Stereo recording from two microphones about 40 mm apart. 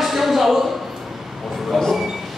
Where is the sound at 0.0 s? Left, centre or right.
Centre.